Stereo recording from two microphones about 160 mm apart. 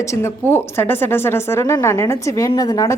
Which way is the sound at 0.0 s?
15° left (ahead or behind).